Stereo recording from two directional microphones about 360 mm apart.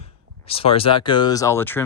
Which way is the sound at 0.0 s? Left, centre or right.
Centre.